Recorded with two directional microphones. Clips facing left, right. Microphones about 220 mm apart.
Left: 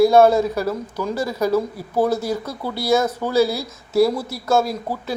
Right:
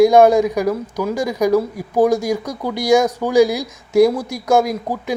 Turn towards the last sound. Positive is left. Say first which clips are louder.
# right 3 dB
turn(degrees=-15)  # may be behind; listen again after turning